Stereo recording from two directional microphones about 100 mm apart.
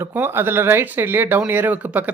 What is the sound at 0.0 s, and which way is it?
Speech, 20° right (ahead or behind).